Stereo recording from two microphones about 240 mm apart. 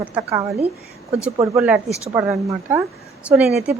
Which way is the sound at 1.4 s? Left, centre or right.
Centre.